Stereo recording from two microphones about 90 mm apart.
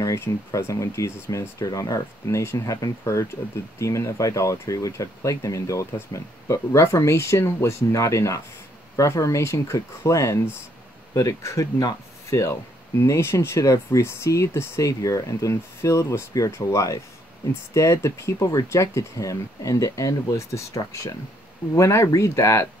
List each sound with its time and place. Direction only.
0.0 s speech: 35° left (ahead or behind)